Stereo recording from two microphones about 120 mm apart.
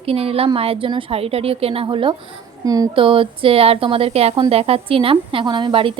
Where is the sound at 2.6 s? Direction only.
30° right (ahead or behind).